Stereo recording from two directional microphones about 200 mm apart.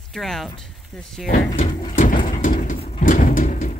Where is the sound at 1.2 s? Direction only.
40° left (ahead or behind).